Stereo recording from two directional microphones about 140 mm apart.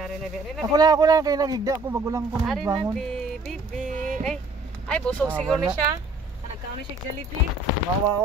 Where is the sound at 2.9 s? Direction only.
5° left (ahead or behind).